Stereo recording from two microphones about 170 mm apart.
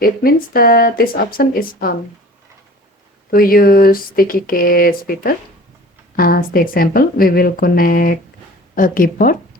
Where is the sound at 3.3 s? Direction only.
60° left (ahead or behind).